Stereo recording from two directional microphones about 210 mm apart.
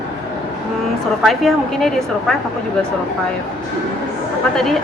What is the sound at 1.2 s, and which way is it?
A woman's voice, centre (ahead or behind).